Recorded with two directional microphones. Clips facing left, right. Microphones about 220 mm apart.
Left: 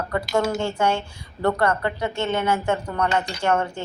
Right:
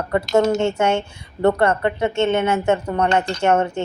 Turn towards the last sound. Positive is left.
turn(degrees=-25)  # may be behind; listen again after turning